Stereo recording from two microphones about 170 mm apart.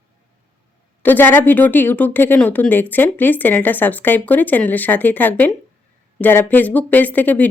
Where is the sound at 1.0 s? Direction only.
10° left (ahead or behind).